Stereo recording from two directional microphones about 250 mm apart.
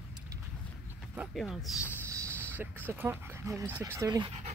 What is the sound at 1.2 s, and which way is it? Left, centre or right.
Speech, centre.